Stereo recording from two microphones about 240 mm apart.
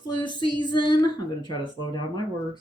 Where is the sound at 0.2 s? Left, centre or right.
Centre.